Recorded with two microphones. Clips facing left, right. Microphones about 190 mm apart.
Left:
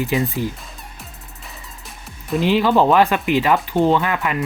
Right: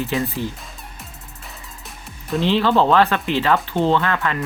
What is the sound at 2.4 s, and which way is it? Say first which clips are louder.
Speech: left 1 dB; 10° left (ahead or behind).